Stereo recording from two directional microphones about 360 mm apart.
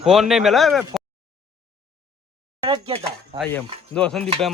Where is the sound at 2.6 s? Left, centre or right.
Centre.